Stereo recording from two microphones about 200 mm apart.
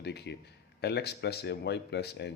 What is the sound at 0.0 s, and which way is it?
Speech, 55° left (ahead or behind).